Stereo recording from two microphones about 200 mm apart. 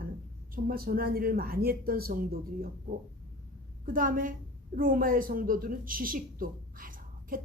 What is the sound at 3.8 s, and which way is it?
Speech, 45° right (ahead or behind).